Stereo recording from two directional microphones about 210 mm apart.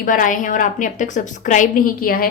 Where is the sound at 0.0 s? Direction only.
40° left (ahead or behind).